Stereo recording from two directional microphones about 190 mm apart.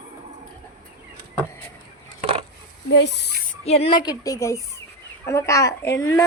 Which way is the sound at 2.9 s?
65° left (ahead or behind).